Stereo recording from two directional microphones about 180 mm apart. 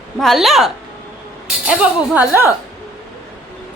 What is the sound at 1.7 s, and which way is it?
Speech, 5° right (ahead or behind).